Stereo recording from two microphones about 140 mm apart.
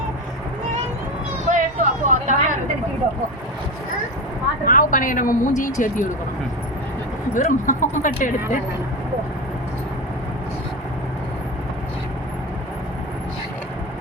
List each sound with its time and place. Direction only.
1.5 s vehicle: 65° right (ahead or behind)
4.6 s speech: 80° left
7.3 s speech: 65° left (ahead or behind)